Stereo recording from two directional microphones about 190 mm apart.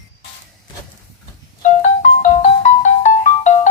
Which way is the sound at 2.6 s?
40° left (ahead or behind).